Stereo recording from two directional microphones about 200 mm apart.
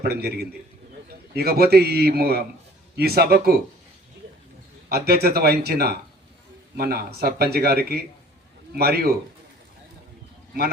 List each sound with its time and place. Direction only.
0.0 s speech: 50° right (ahead or behind)
4.9 s speech: 50° right (ahead or behind)